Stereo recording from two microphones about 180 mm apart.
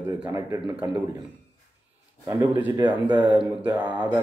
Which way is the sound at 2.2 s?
20° right (ahead or behind).